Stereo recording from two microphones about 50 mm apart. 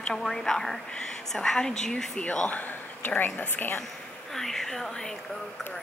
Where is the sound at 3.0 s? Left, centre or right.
Left.